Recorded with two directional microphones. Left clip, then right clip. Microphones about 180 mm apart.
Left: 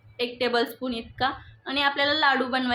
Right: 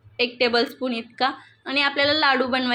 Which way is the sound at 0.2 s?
20° right (ahead or behind).